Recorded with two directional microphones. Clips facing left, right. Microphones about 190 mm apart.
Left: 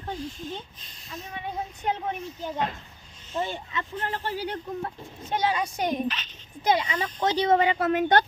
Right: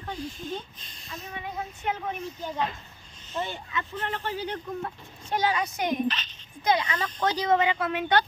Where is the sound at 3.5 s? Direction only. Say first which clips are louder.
Left 1 dB; 30° left (ahead or behind).